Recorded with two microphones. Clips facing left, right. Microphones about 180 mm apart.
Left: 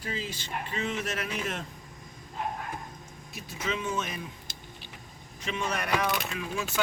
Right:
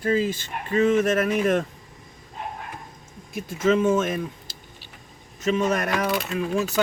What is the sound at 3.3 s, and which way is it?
Speech, 50° right (ahead or behind).